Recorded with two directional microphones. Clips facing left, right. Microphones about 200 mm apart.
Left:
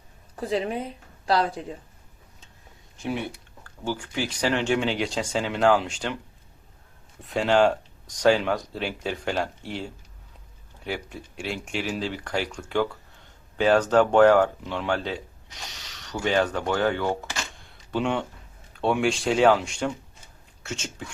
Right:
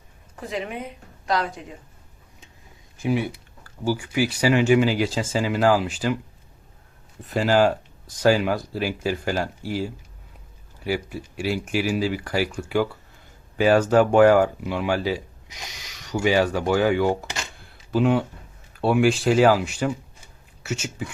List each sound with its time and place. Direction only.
0.3 s a woman's voice: 30° left (ahead or behind)
3.0 s speech: 5° right (ahead or behind)
7.2 s speech: centre (ahead or behind)